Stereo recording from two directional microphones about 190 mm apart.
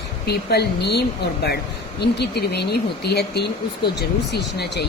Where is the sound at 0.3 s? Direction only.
60° left (ahead or behind).